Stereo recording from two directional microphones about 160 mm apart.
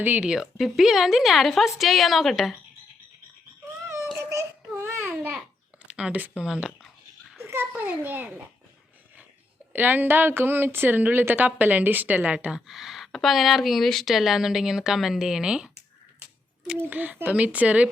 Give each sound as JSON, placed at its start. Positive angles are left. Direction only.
{"t": 0.0, "sound": "a woman's voice", "side_deg": -10}
{"t": 3.8, "sound": "a sound", "side_deg": -15}
{"t": 4.2, "sound": "babbling", "side_deg": -20}
{"t": 5.9, "sound": "a child's voice", "side_deg": -10}
{"t": 9.7, "sound": "a woman's voice", "side_deg": -10}